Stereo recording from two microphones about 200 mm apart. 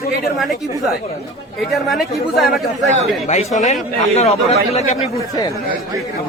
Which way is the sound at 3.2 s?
35° left (ahead or behind).